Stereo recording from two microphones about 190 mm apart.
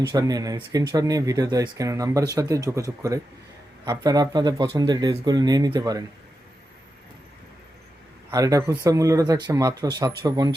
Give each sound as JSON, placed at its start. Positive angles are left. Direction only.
{"t": 0.1, "sound": "speech", "side_deg": -20}
{"t": 8.3, "sound": "speech", "side_deg": -20}